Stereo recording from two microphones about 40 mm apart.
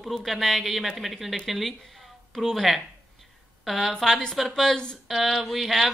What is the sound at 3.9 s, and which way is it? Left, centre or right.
Speech, centre.